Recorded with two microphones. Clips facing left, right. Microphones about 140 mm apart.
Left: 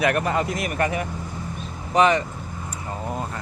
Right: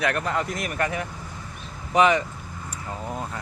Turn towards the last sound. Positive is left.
turn(degrees=10)  # may be behind; listen again after turning